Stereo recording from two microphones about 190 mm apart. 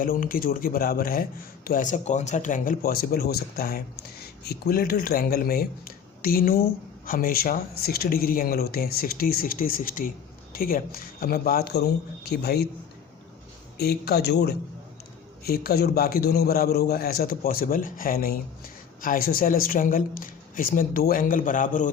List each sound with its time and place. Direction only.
0.0 s speech: 50° left (ahead or behind)
13.7 s speech: 55° left (ahead or behind); by 21.9 s 40° left (ahead or behind)